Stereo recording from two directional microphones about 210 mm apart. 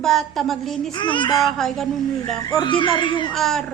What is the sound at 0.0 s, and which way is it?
Speech, centre (ahead or behind).